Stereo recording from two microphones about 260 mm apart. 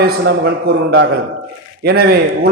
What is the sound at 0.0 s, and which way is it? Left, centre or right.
A man's voice, right.